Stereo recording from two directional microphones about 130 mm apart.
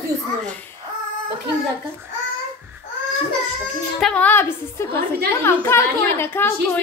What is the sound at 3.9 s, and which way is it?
A woman's voice, 5° left (ahead or behind).